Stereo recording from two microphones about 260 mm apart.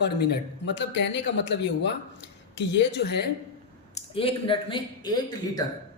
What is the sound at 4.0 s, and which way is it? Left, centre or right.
Speech, left.